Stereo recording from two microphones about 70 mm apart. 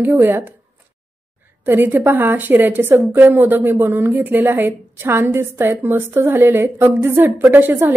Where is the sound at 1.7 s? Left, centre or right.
Right.